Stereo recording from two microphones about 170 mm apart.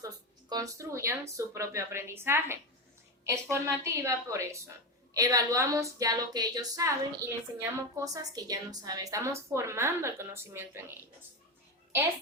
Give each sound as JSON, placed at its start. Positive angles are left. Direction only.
{"t": 0.0, "sound": "a woman's voice", "side_deg": -20}